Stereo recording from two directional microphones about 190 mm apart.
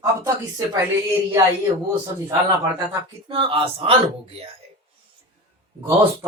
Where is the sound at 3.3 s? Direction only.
30° right (ahead or behind).